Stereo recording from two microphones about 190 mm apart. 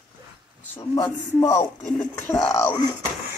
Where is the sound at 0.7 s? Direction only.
15° left (ahead or behind).